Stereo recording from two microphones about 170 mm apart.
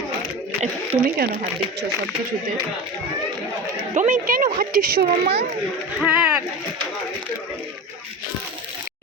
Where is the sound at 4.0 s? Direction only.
45° right (ahead or behind); by 5.4 s 70° right (ahead or behind).